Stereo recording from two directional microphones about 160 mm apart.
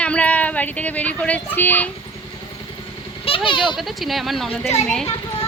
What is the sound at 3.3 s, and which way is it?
Speech, 35° left (ahead or behind).